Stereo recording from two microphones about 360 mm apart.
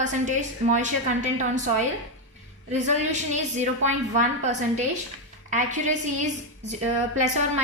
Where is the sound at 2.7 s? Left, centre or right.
Centre.